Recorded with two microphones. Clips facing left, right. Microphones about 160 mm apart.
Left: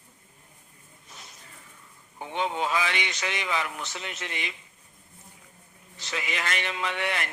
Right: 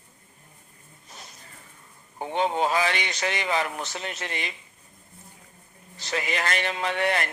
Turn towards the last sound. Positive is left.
turn(degrees=-40)  # may be behind; listen again after turning